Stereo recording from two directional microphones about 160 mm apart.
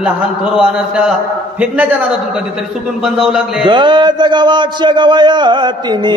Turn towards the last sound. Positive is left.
turn(degrees=-30)  # may be behind; listen again after turning